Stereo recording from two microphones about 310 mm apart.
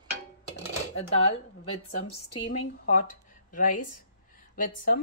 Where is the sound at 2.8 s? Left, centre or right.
Left.